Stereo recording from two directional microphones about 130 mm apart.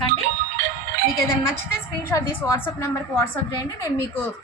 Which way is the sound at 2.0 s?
20° left (ahead or behind).